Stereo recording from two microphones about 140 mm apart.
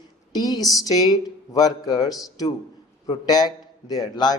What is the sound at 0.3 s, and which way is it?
Speech, 30° left (ahead or behind).